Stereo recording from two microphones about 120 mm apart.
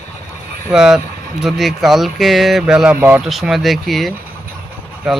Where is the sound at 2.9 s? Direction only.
15° right (ahead or behind).